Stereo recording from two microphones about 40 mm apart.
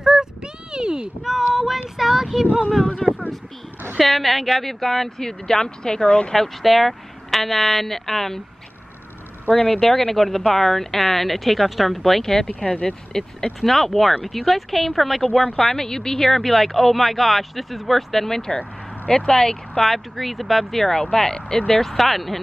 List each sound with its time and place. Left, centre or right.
0.0 s a sound: centre
1.5 s child singing: centre
3.0 s speech: centre; by 6.3 s left
6.3 s speech: centre
9.5 s speech: centre
12.6 s speech: left
13.1 s speech: centre
13.6 s speech: centre
19.9 s speech: centre